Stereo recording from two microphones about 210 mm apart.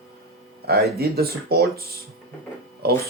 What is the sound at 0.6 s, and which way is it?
Speech, 50° right (ahead or behind).